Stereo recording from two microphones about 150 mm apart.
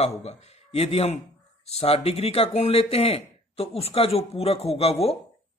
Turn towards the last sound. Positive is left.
turn(degrees=40)  # may be behind; listen again after turning